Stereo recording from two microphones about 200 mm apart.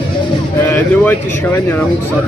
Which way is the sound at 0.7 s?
10° left (ahead or behind).